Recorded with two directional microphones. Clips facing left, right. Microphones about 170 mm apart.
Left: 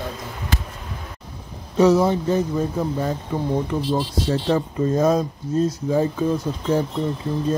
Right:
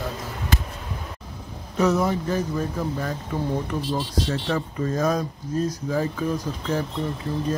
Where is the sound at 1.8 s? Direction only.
30° left (ahead or behind).